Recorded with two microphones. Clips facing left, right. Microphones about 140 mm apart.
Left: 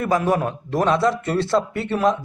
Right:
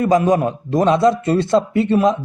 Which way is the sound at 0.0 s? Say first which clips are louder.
Right 5 dB; 15° right (ahead or behind).